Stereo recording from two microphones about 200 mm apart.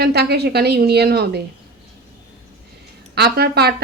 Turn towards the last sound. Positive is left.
turn(degrees=-55)  # may be behind; listen again after turning